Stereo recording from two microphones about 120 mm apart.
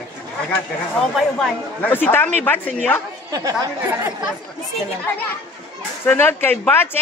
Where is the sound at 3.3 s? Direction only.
30° right (ahead or behind).